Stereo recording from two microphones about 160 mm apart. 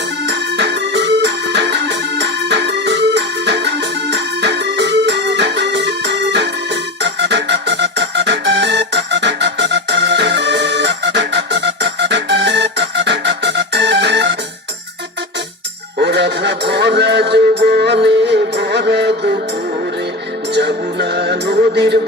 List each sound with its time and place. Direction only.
0.3 s music: 90° right
16.0 s music: 90° right
20.5 s music: 90° right